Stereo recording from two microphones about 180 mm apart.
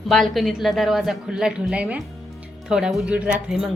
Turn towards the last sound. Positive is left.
turn(degrees=0)  # may be behind; listen again after turning